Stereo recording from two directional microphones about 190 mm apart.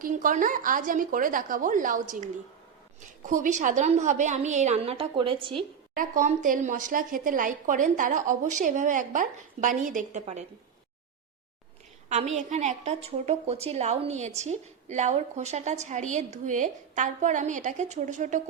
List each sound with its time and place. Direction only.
0.0 s a woman's voice: 45° right (ahead or behind); by 5.5 s 25° right (ahead or behind)
5.9 s a woman's voice: 45° right (ahead or behind)
12.0 s a woman's voice: 35° right (ahead or behind)